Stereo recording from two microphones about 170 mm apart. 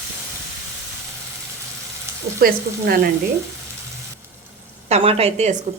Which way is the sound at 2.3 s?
60° right (ahead or behind).